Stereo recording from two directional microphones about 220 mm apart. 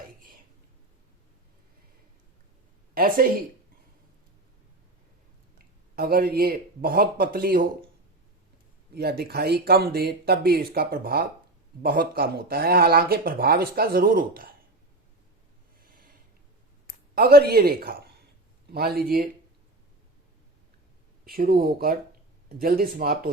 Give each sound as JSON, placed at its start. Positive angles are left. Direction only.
{"t": 2.9, "sound": "speech", "side_deg": -40}
{"t": 5.5, "sound": "speech", "side_deg": -45}
{"t": 9.0, "sound": "speech", "side_deg": -45}
{"t": 15.8, "sound": "a sound", "side_deg": -40}
{"t": 17.2, "sound": "speech", "side_deg": -45}
{"t": 21.2, "sound": "speech", "side_deg": -40}